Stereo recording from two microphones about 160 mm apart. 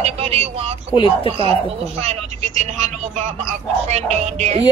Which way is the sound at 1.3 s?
35° right (ahead or behind).